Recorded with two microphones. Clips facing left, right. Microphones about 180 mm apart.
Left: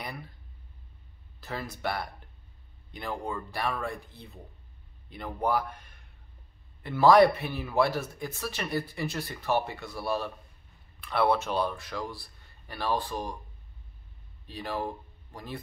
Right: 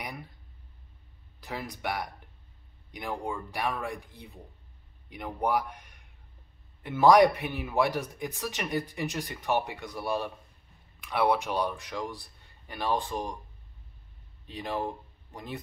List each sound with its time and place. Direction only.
0.0 s speech: 15° right (ahead or behind)
1.4 s a man's voice: 15° right (ahead or behind)
14.4 s speech: 20° right (ahead or behind)